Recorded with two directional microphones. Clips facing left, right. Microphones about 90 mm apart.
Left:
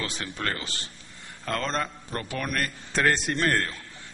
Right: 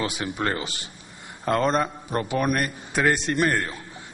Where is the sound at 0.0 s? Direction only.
15° right (ahead or behind).